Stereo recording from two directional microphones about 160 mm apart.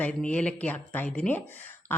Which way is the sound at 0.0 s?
5° left (ahead or behind).